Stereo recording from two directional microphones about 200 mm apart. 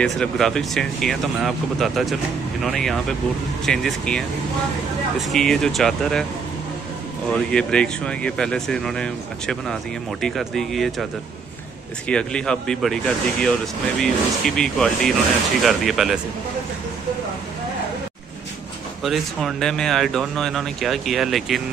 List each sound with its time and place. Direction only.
0.0 s speech: centre (ahead or behind)
5.2 s speech: centre (ahead or behind)
7.2 s speech: 5° left (ahead or behind)
12.1 s speech: 5° left (ahead or behind)
19.0 s speech: centre (ahead or behind)